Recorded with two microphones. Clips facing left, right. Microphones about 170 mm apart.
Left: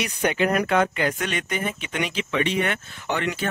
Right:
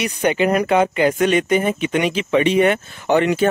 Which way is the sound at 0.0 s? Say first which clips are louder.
Right 5 dB; 5° right (ahead or behind).